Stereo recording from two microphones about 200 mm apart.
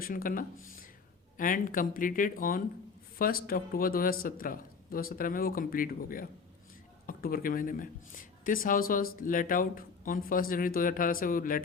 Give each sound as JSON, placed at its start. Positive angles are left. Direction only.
{"t": 0.0, "sound": "speech", "side_deg": 45}